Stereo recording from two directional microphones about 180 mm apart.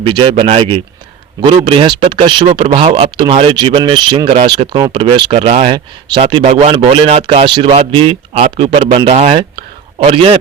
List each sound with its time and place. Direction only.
0.0 s speech: 30° right (ahead or behind)
6.5 s speech: 40° right (ahead or behind)
6.7 s speech: 30° right (ahead or behind)